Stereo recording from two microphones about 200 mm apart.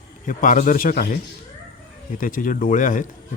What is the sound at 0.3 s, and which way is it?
Speech, 40° left (ahead or behind).